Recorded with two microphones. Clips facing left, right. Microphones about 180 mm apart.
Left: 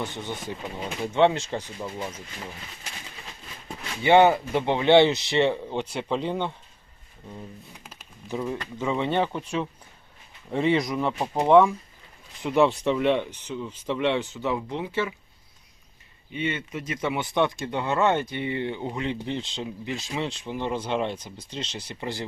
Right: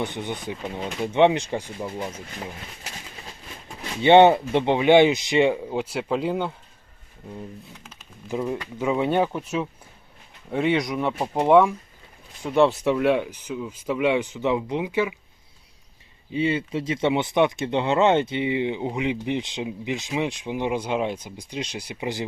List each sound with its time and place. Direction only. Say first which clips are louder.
0.0 s speech: right 3 dB; 15° right (ahead or behind)
4.0 s speech: right 4 dB; 25° right (ahead or behind); by 6.5 s 5° right (ahead or behind)
8.3 s speech: right 3 dB; 10° right (ahead or behind)
16.3 s speech: right 6 dB; 30° right (ahead or behind)